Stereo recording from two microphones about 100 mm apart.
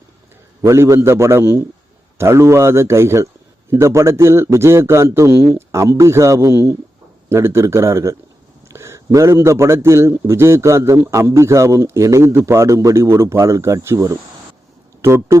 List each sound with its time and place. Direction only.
0.6 s a man's voice: 30° right (ahead or behind)